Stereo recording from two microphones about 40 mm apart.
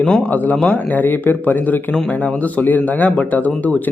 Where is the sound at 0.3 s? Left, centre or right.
Left.